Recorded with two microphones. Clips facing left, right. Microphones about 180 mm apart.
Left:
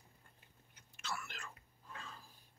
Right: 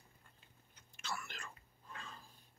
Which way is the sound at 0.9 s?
Centre (ahead or behind).